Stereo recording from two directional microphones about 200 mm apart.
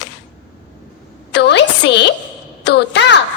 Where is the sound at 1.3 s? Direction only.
60° left (ahead or behind).